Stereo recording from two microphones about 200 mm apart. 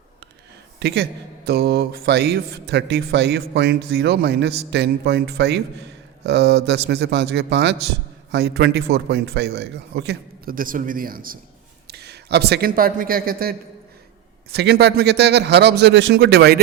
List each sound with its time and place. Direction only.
0.8 s a man's voice: 55° right (ahead or behind)